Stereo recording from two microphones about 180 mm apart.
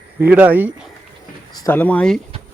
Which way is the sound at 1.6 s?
10° left (ahead or behind).